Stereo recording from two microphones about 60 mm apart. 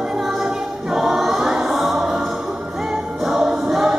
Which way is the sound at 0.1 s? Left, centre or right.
Centre.